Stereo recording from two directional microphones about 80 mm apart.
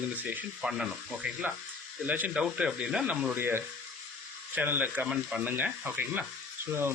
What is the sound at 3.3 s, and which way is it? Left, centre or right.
Speech, right.